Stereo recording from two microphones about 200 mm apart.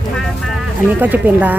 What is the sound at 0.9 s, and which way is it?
Speech, 10° right (ahead or behind).